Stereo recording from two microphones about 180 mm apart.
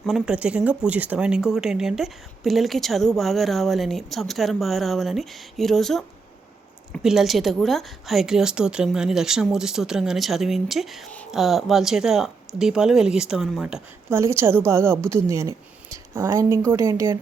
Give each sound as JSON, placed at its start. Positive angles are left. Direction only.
{"t": 0.0, "sound": "a woman's voice", "side_deg": -5}